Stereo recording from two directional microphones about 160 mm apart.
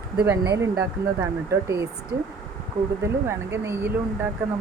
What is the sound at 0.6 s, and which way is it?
Speech, 20° right (ahead or behind).